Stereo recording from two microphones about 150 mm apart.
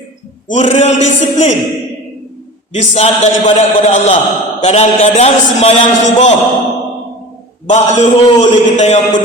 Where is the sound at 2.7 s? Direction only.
45° left (ahead or behind).